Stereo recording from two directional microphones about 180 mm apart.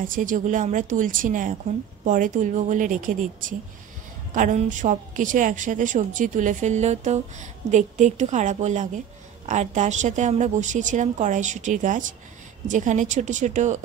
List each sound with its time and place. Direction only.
0.0 s a woman's voice: 50° right (ahead or behind)